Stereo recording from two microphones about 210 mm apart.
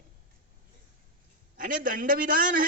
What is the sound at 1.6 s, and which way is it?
A woman's voice, 40° right (ahead or behind).